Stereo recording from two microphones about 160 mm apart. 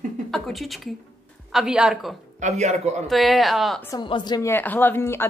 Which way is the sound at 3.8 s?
20° left (ahead or behind).